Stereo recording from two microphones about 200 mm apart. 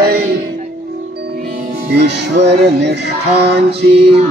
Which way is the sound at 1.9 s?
60° right (ahead or behind).